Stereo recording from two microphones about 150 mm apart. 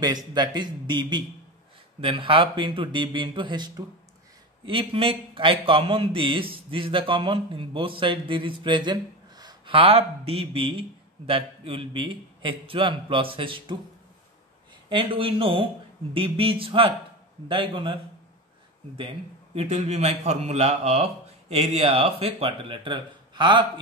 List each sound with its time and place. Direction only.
0.0 s a man's voice: 25° right (ahead or behind)
14.9 s a man's voice: 35° right (ahead or behind)
19.5 s a man's voice: 50° right (ahead or behind); by 23.6 s 30° right (ahead or behind)